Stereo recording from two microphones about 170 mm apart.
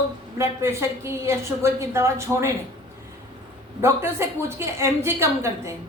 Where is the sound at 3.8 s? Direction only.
15° right (ahead or behind).